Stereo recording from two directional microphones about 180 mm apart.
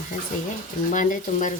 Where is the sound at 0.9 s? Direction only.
45° left (ahead or behind).